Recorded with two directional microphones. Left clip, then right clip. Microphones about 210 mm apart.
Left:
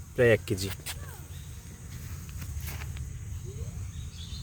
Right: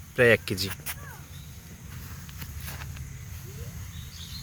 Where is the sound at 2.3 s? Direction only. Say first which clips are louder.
Right 2 dB; 25° right (ahead or behind).